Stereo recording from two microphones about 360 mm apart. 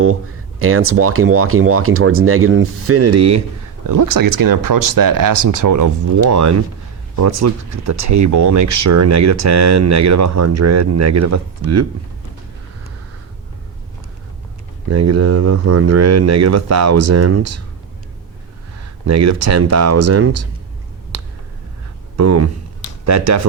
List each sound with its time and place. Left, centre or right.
0.6 s speech: right
3.8 s speech: right
14.8 s speech: right
19.0 s speech: right
22.1 s speech: right